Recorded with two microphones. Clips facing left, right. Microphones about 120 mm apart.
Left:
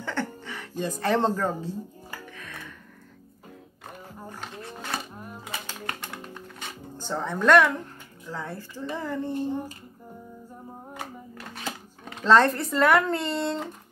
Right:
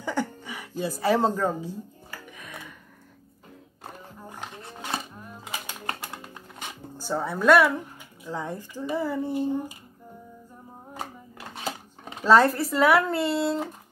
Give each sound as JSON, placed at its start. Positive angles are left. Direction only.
{"t": 0.0, "sound": "speech", "side_deg": -10}
{"t": 2.3, "sound": "music", "side_deg": -15}
{"t": 4.3, "sound": "a sound", "side_deg": -15}
{"t": 7.0, "sound": "speech", "side_deg": -10}
{"t": 11.3, "sound": "speech", "side_deg": -15}